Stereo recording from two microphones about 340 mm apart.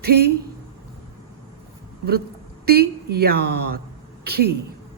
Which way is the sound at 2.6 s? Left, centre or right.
Right.